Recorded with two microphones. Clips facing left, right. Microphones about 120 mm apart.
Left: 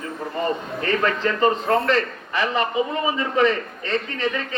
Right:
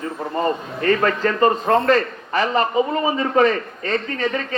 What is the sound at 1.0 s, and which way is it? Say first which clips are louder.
A man's voice: even; 45° right (ahead or behind).